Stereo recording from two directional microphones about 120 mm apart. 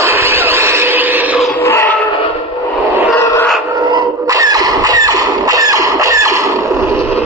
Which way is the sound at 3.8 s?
40° right (ahead or behind).